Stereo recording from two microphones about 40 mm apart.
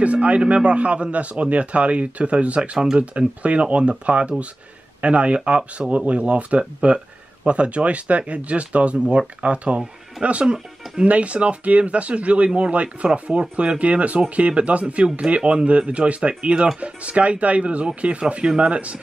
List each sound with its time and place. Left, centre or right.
0.0 s speech: right
11.1 s speech: right